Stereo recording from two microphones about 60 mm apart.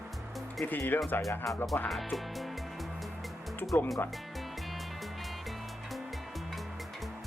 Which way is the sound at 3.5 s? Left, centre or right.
Left.